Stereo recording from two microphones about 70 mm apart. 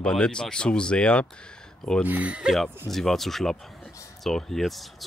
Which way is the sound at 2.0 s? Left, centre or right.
Right.